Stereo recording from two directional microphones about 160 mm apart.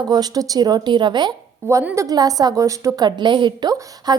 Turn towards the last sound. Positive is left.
turn(degrees=-25)  # may be behind; listen again after turning